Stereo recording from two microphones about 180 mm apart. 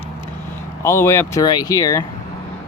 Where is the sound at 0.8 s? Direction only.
15° left (ahead or behind).